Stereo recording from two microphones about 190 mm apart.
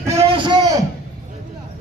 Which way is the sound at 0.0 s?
15° right (ahead or behind).